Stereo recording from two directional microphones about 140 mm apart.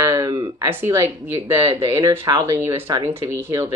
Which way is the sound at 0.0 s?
20° right (ahead or behind).